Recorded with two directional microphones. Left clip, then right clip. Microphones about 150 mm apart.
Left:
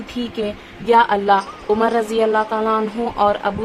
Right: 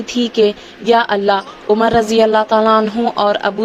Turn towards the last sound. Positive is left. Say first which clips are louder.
# right 3 dB
turn(degrees=-35)  # may be behind; listen again after turning